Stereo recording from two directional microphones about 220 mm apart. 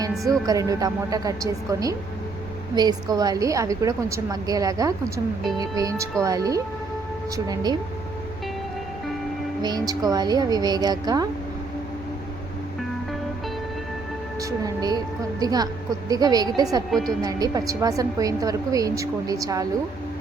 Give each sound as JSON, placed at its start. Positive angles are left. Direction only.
{"t": 0.4, "sound": "a woman's voice", "side_deg": -15}
{"t": 9.6, "sound": "a woman's voice", "side_deg": -20}
{"t": 14.6, "sound": "a woman's voice", "side_deg": -15}
{"t": 16.9, "sound": "speech", "side_deg": 0}
{"t": 17.2, "sound": "a woman's voice", "side_deg": -15}